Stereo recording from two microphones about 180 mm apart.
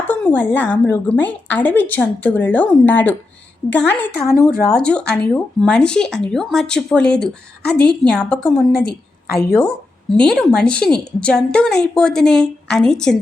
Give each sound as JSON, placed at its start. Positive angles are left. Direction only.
{"t": 0.1, "sound": "a woman's voice", "side_deg": 10}
{"t": 8.8, "sound": "a woman's voice", "side_deg": 60}
{"t": 9.6, "sound": "speech", "side_deg": 5}